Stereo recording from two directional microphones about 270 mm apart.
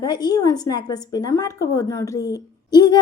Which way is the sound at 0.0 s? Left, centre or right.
Centre.